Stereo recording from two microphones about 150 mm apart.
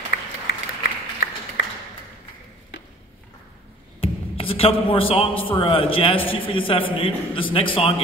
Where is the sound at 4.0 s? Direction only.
40° left (ahead or behind).